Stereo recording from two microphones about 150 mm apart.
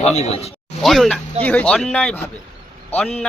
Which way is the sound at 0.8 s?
Centre (ahead or behind).